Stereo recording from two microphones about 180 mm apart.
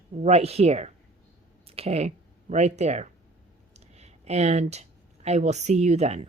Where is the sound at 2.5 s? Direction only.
40° right (ahead or behind).